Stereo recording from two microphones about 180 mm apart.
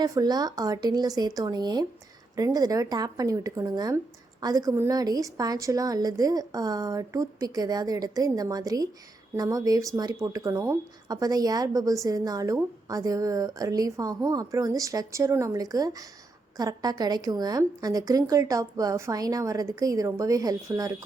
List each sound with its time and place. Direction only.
0.0 s speech: 20° right (ahead or behind)